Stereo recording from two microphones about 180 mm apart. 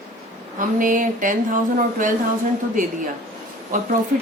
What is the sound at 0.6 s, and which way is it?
Speech, 50° right (ahead or behind).